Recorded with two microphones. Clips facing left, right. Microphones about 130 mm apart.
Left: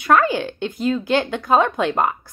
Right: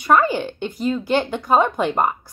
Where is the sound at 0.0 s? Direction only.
10° right (ahead or behind).